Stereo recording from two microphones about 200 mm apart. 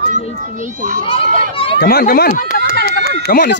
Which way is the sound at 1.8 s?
50° left (ahead or behind).